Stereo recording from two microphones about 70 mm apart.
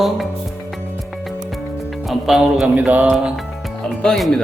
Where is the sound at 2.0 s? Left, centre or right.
Centre.